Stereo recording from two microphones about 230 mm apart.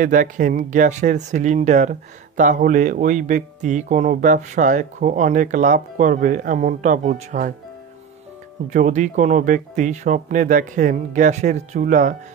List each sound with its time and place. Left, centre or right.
0.0 s speech: right
8.6 s speech: right